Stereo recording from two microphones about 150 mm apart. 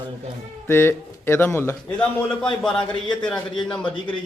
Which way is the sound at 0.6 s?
15° left (ahead or behind).